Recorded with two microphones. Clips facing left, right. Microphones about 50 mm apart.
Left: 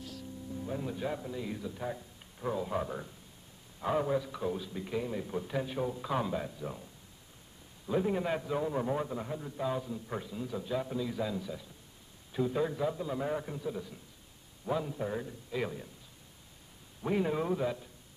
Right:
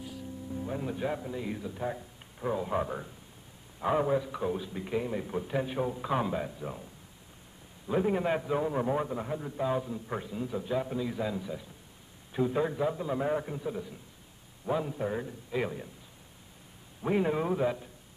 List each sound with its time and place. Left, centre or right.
0.0 s a man's voice: centre
7.9 s a man's voice: centre
17.0 s a man's voice: centre